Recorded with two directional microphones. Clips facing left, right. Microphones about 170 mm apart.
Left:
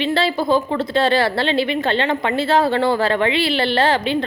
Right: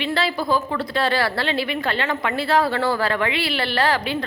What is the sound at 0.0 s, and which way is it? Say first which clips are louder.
A woman's voice: left 4 dB; 25° left (ahead or behind).